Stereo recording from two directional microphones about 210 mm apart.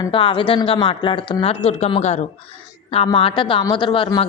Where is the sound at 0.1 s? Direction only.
25° left (ahead or behind).